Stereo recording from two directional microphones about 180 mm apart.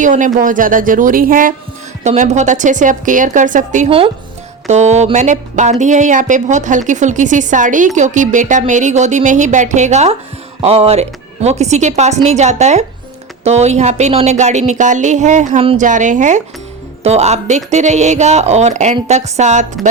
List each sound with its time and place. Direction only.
0.0 s speech: 45° right (ahead or behind)